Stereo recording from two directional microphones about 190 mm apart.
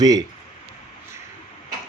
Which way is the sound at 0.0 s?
20° right (ahead or behind).